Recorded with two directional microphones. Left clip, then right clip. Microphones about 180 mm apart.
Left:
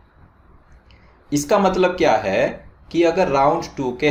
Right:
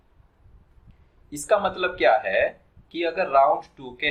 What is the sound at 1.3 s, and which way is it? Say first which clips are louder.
Speech: left 5 dB; 50° left (ahead or behind).